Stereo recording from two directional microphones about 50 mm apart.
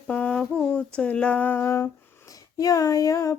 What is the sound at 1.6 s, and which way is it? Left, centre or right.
Humming, left.